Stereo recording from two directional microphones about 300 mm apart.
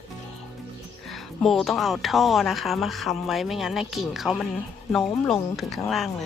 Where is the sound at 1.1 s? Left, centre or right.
Centre.